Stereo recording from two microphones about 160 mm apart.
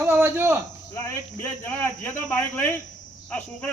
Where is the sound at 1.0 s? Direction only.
15° left (ahead or behind).